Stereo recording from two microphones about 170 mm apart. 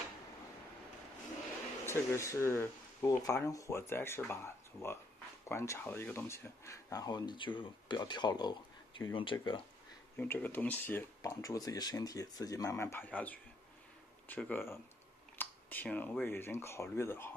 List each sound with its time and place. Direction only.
1.9 s speech: 15° left (ahead or behind)
10.1 s speech: 10° left (ahead or behind)